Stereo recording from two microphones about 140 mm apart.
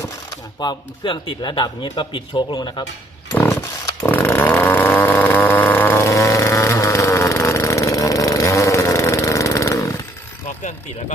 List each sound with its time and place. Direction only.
0.0 s speech: 25° left (ahead or behind)
3.3 s chainsaw: 20° left (ahead or behind)